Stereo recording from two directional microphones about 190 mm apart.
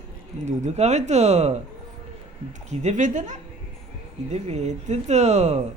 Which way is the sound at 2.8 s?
40° right (ahead or behind).